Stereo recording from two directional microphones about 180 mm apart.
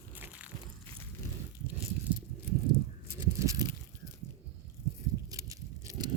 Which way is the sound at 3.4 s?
15° right (ahead or behind).